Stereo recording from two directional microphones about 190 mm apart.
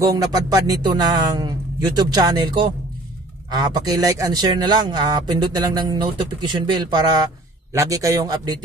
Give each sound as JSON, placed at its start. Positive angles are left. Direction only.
{"t": 0.0, "sound": "speech", "side_deg": -20}